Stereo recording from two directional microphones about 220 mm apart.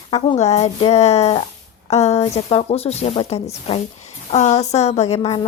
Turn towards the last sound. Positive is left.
turn(degrees=30)  # may be behind; listen again after turning